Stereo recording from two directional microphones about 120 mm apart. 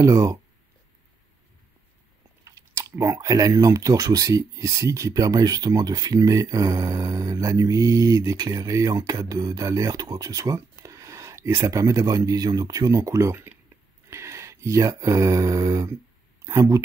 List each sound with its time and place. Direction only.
0.0 s speech: 30° right (ahead or behind)
2.4 s speech: 25° right (ahead or behind)